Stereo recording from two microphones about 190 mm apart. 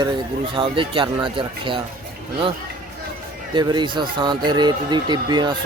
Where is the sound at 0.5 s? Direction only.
25° right (ahead or behind).